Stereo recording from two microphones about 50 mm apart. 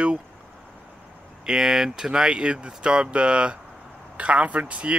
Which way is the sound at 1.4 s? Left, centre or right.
Centre.